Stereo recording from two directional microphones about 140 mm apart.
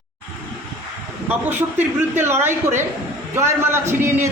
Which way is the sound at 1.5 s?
15° right (ahead or behind).